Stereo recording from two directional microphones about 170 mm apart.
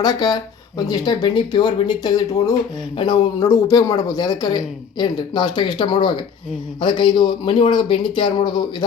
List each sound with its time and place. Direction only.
0.0 s speech: 25° left (ahead or behind)